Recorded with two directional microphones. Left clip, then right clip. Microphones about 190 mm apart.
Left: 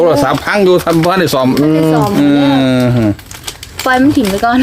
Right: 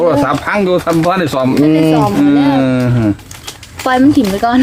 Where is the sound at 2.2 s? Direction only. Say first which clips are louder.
Left 1 dB; 50° left (ahead or behind).